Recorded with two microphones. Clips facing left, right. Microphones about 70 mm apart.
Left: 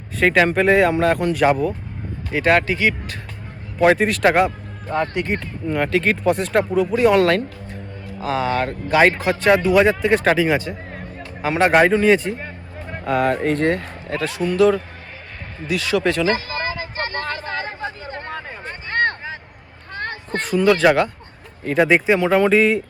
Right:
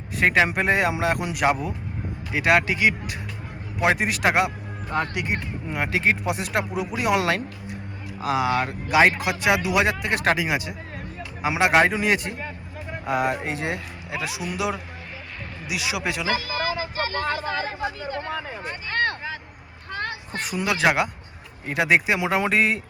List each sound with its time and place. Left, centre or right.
0.2 s a man's voice: centre
6.9 s music: centre
8.3 s speech: centre
16.2 s vehicle: left
20.0 s a sound: left
20.4 s speech: centre